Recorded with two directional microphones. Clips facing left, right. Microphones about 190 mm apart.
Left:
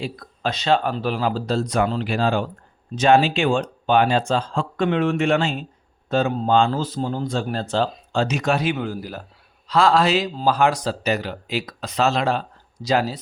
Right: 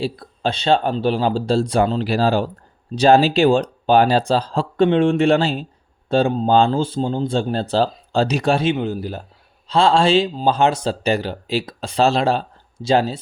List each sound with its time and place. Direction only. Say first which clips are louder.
0.0 s speech: right 4 dB; 30° right (ahead or behind)